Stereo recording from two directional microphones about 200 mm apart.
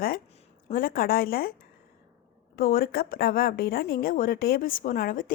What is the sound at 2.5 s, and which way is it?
A woman's voice, 45° left (ahead or behind).